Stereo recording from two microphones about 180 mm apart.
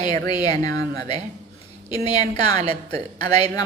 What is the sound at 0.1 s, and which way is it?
Speech, 20° left (ahead or behind).